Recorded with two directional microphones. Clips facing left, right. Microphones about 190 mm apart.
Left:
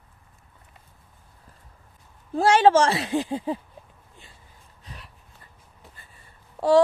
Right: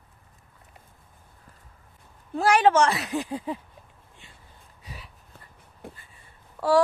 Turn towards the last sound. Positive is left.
turn(degrees=25)  # may be behind; listen again after turning